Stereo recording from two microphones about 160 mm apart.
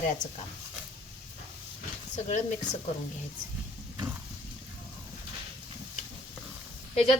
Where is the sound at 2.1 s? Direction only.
50° left (ahead or behind).